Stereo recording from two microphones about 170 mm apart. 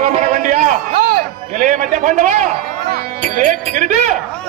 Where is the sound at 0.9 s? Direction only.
70° right (ahead or behind).